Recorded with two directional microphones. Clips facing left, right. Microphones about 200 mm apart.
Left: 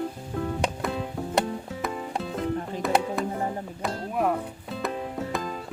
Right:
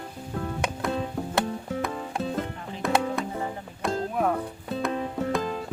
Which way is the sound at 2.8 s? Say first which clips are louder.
Right 1 dB; centre (ahead or behind).